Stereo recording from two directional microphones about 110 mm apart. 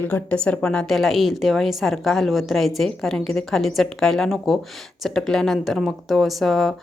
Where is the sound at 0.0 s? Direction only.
15° left (ahead or behind).